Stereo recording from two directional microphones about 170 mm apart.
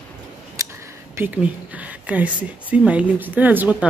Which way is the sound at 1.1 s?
10° right (ahead or behind).